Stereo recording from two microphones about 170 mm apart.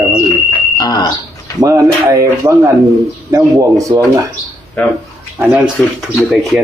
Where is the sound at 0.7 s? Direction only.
25° left (ahead or behind).